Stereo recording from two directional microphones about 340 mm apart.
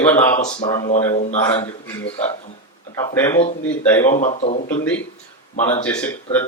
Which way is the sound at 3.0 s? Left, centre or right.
Centre.